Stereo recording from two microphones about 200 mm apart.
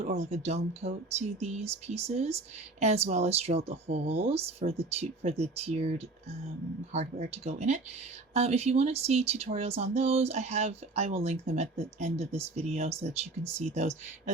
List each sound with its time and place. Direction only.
0.2 s speech: 35° right (ahead or behind)